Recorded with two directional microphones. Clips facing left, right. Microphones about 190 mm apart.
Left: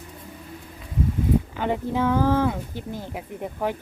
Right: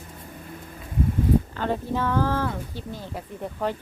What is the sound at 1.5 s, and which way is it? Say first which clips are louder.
A woman's voice: left 2 dB; 15° left (ahead or behind).